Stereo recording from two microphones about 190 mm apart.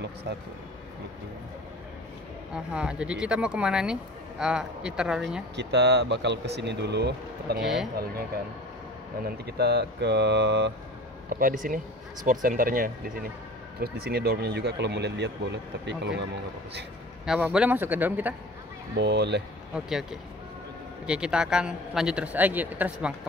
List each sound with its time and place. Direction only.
2.5 s speech: 5° right (ahead or behind)
5.6 s speech: 60° right (ahead or behind)
7.6 s speech: centre (ahead or behind)
9.2 s speech: 60° right (ahead or behind)
11.2 s speech: 50° right (ahead or behind); by 16.3 s 65° right (ahead or behind)
17.3 s a man's voice: 5° right (ahead or behind)
18.9 s speech: 65° right (ahead or behind)
19.7 s speech: centre (ahead or behind)